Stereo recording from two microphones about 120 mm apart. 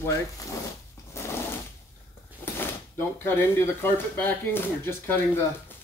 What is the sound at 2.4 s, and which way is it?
Drawer open or close, 20° left (ahead or behind).